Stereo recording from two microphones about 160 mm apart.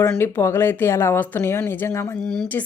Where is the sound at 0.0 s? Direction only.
15° left (ahead or behind).